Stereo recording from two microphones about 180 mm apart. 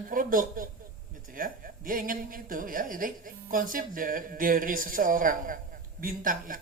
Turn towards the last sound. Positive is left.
turn(degrees=-50)  # may be behind; listen again after turning